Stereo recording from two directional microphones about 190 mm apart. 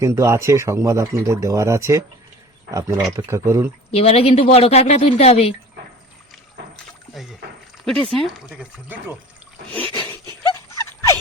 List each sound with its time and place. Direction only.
0.0 s speech: 15° right (ahead or behind)
3.1 s speech: 15° right (ahead or behind)
3.9 s speech: 30° left (ahead or behind)
7.1 s speech: centre (ahead or behind)
9.7 s a sound: 10° left (ahead or behind)